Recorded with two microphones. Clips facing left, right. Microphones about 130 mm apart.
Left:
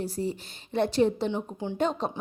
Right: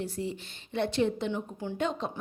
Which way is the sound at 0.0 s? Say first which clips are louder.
Left 3 dB; 40° left (ahead or behind).